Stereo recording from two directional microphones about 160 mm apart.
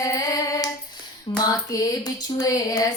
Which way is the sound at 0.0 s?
20° left (ahead or behind).